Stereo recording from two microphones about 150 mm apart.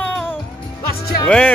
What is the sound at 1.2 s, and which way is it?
Speech, 5° left (ahead or behind).